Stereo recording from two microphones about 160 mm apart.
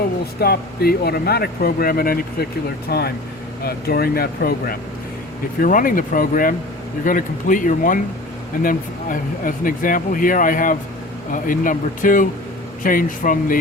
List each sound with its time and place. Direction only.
0.3 s speech: 80° left
2.9 s speech: 85° left
3.6 s speech: 70° left (ahead or behind)
5.5 s speech: 60° left (ahead or behind)